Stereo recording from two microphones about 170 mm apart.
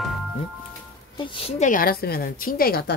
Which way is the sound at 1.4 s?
40° left (ahead or behind).